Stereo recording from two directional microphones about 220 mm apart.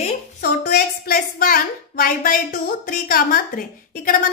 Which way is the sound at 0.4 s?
45° left (ahead or behind).